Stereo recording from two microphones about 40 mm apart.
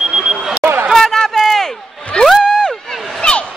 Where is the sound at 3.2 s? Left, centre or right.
Left.